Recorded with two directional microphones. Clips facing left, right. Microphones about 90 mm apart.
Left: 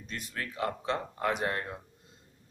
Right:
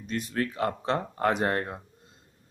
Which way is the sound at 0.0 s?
30° right (ahead or behind).